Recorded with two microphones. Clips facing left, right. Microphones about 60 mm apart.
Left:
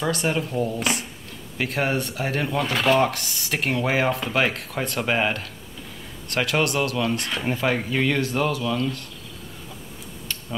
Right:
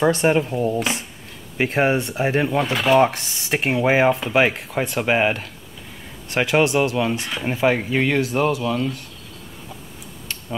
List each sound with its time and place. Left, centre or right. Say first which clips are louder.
0.0 s speech: right 7 dB; right
2.7 s speech: right 2 dB; centre
3.0 s speech: right 5 dB; right